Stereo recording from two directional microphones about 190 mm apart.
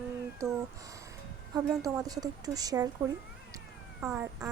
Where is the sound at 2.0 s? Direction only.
20° right (ahead or behind).